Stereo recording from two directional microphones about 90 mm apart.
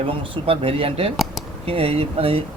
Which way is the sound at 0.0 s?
90° right.